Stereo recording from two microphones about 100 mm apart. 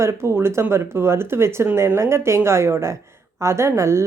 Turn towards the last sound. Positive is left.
turn(degrees=-30)  # may be behind; listen again after turning